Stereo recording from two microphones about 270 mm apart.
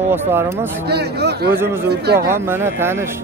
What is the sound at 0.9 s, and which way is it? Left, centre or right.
Speech, right.